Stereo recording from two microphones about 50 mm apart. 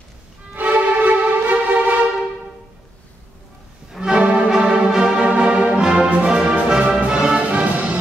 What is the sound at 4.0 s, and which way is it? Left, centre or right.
Music, centre.